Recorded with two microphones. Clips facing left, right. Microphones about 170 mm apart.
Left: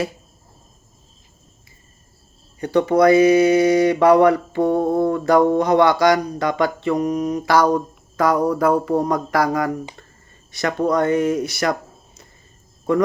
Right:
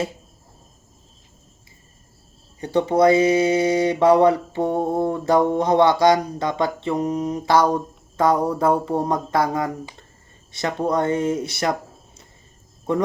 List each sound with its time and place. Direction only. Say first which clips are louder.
2.6 s speech: left 2 dB; 25° right (ahead or behind)